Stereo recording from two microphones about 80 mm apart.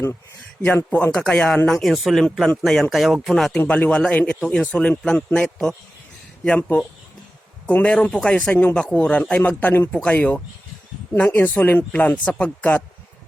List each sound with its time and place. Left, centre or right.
0.9 s speech: centre
3.7 s speech: centre
7.7 s speech: centre